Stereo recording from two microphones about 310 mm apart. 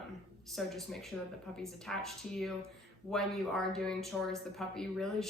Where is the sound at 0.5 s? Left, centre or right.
Centre.